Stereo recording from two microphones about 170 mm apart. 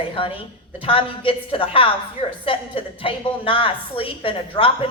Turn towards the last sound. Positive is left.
turn(degrees=30)  # may be behind; listen again after turning